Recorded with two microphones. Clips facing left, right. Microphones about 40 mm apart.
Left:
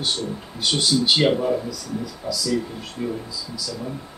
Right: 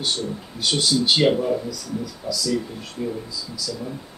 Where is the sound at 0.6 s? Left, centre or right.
Centre.